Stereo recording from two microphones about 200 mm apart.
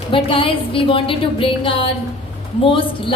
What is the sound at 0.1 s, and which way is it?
Speech, 25° left (ahead or behind).